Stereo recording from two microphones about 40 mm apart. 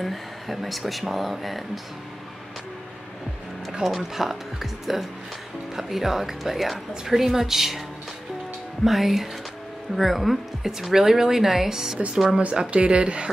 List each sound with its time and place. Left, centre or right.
0.0 s speech: centre
3.8 s speech: centre
8.8 s speech: centre
12.7 s speech: right